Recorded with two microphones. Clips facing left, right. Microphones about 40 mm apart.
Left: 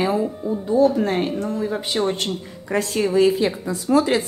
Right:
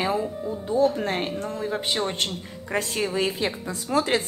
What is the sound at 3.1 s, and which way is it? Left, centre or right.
Speech, right.